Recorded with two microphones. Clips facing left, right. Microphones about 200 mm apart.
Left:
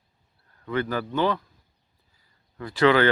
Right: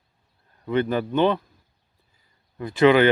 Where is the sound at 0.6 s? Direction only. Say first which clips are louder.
Right 4 dB; 20° right (ahead or behind).